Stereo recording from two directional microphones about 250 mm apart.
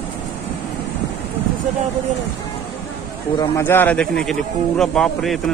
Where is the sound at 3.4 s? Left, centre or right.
Centre.